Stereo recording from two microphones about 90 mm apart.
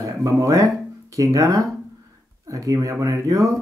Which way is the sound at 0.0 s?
35° right (ahead or behind).